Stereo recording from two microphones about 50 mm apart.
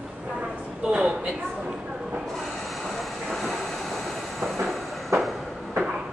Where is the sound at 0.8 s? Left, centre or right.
Centre.